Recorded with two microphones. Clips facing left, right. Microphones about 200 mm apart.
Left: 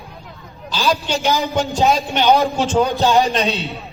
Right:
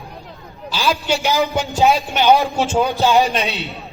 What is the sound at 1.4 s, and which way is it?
Speech, centre (ahead or behind).